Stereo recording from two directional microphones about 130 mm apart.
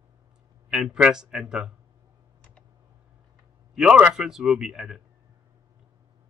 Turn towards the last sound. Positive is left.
turn(degrees=-5)  # may be behind; listen again after turning